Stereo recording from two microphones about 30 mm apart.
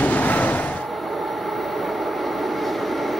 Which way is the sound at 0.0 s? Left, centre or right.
Left.